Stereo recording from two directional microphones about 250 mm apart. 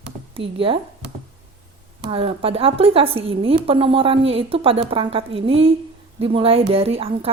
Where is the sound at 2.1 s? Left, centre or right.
Right.